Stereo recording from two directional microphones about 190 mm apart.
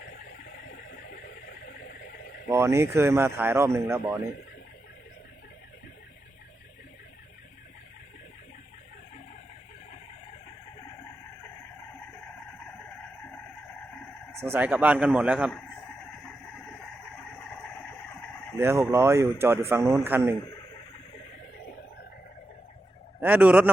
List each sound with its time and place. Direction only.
0.6 s a sound: 50° left (ahead or behind)
2.5 s speech: 15° right (ahead or behind)
14.4 s speech: 10° right (ahead or behind)
17.3 s vehicle: 10° left (ahead or behind)
18.6 s speech: 15° right (ahead or behind)
23.2 s speech: 10° right (ahead or behind)